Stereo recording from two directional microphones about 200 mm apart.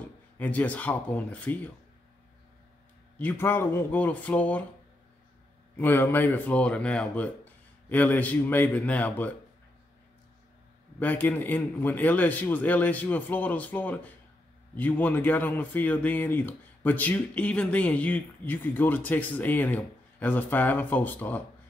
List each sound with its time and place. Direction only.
0.4 s speech: 10° left (ahead or behind)
3.2 s speech: 10° left (ahead or behind)
5.8 s speech: 10° left (ahead or behind)
11.0 s speech: 10° left (ahead or behind)